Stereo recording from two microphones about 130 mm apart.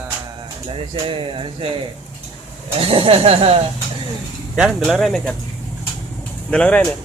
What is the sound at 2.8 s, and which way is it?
Speech, 45° right (ahead or behind).